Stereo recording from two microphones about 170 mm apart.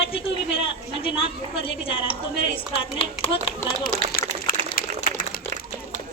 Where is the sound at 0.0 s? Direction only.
30° left (ahead or behind).